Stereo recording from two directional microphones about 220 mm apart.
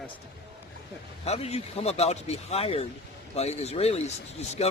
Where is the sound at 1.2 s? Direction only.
30° left (ahead or behind).